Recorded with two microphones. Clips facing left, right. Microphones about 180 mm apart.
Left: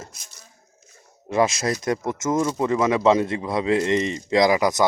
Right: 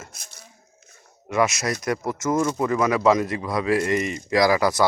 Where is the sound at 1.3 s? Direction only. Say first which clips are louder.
Left 2 dB; 30° left (ahead or behind).